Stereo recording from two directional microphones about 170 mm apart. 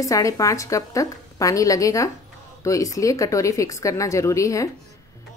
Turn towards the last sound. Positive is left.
turn(degrees=20)  # may be behind; listen again after turning